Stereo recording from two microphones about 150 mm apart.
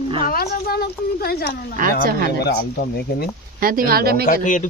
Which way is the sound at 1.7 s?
65° right (ahead or behind).